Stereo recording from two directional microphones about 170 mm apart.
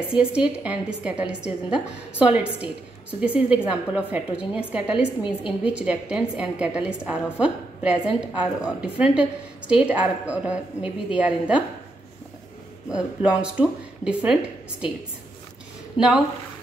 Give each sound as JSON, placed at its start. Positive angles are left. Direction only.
{"t": 0.1, "sound": "a woman's voice", "side_deg": -5}
{"t": 12.9, "sound": "speech", "side_deg": -5}
{"t": 16.0, "sound": "speech", "side_deg": 30}